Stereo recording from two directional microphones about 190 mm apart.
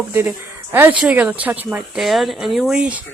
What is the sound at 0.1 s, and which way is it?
Speech, 10° right (ahead or behind).